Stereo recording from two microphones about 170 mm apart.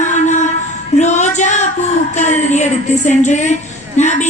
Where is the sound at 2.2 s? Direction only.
45° left (ahead or behind).